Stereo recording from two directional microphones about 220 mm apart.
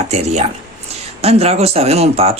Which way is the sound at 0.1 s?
30° right (ahead or behind).